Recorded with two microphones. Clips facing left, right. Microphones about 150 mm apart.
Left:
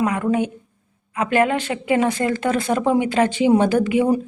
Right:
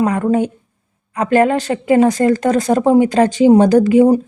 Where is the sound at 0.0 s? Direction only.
35° right (ahead or behind).